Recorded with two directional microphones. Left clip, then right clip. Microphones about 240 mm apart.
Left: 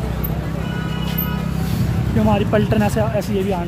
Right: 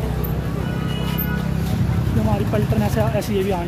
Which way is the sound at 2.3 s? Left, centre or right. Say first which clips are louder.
Left 5 dB; centre.